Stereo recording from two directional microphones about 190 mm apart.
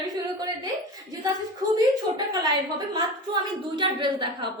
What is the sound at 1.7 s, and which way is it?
A woman's voice, 20° right (ahead or behind).